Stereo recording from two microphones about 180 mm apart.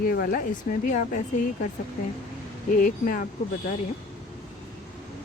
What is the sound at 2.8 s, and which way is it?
Speech, 50° left (ahead or behind).